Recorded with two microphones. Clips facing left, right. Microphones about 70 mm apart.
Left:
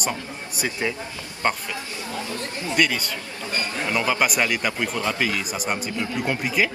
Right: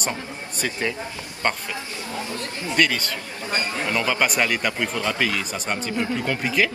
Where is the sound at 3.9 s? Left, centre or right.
Centre.